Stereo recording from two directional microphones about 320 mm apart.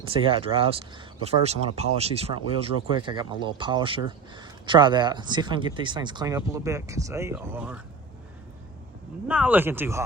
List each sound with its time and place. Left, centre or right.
0.1 s speech: centre
9.2 s speech: centre